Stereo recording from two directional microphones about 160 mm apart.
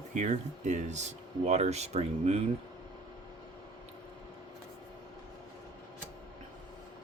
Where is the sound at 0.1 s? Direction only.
50° right (ahead or behind).